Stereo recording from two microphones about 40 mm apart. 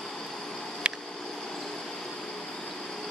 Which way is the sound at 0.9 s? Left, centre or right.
Right.